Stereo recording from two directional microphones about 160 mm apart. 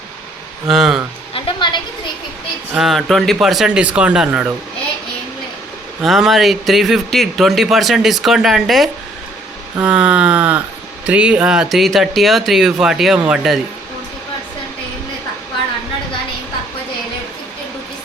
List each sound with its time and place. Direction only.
0.7 s speech: 5° right (ahead or behind)
1.3 s music: 30° left (ahead or behind)
2.7 s speech: centre (ahead or behind)
6.0 s speech: centre (ahead or behind)
9.8 s a sound: 5° right (ahead or behind)
11.0 s speech: 5° right (ahead or behind)